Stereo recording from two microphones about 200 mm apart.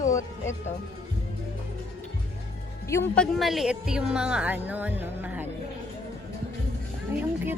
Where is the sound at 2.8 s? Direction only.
10° left (ahead or behind); by 5.5 s 10° right (ahead or behind).